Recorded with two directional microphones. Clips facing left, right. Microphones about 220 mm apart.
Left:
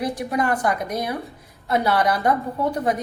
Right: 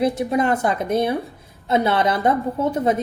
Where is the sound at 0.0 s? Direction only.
25° right (ahead or behind).